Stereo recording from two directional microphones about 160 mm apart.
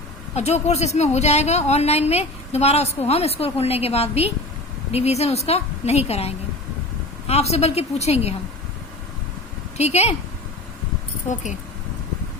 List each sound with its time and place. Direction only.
0.3 s speech: 45° left (ahead or behind)
9.7 s speech: 40° left (ahead or behind)